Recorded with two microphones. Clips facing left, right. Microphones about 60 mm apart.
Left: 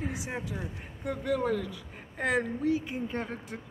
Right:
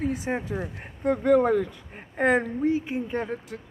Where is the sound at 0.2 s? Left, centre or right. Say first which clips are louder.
Right 7 dB; right.